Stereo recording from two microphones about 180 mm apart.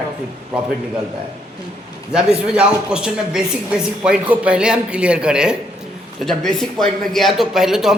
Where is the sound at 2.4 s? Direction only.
5° right (ahead or behind).